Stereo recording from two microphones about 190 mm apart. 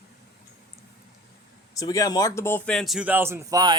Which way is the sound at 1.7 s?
20° left (ahead or behind).